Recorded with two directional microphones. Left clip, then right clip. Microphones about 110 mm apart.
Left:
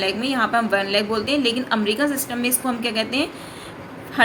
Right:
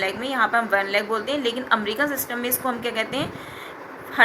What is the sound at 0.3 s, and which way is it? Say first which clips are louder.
Speech: right 1 dB; 35° left (ahead or behind).